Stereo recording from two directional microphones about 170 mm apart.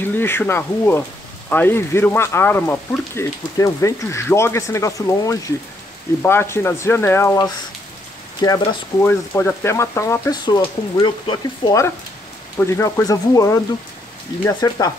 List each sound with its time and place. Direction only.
0.0 s speech: 10° left (ahead or behind)
9.0 s speech: 15° left (ahead or behind)